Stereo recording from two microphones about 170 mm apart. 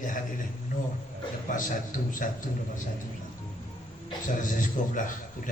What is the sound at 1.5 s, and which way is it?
Speech, 50° left (ahead or behind).